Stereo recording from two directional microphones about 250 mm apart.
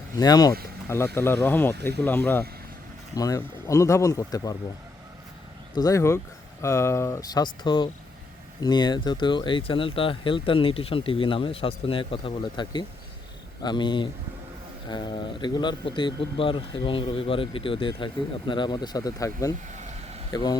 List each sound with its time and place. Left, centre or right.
0.2 s speech: centre
5.7 s speech: centre